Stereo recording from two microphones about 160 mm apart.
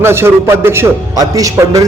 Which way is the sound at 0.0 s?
15° right (ahead or behind).